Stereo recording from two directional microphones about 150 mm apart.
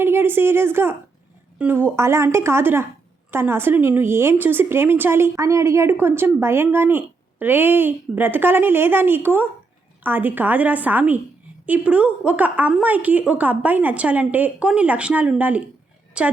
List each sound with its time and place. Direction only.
0.0 s a woman's voice: 15° right (ahead or behind)